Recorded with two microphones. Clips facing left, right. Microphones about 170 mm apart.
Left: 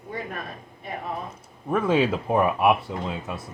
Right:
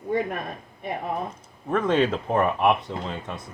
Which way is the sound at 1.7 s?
5° left (ahead or behind).